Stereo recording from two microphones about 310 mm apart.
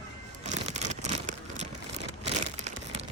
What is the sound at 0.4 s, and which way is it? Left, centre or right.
Crumpling, right.